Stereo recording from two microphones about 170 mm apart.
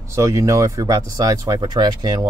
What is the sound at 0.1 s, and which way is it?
Speech, 20° right (ahead or behind).